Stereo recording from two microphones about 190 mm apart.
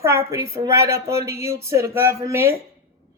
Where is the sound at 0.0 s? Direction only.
15° right (ahead or behind).